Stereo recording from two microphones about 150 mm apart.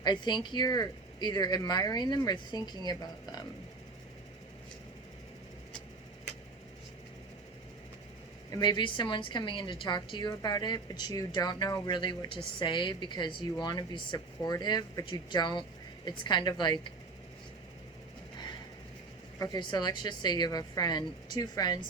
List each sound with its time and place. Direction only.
0.0 s speech: 30° left (ahead or behind)
8.4 s a woman's voice: 25° left (ahead or behind)
19.4 s speech: 25° left (ahead or behind)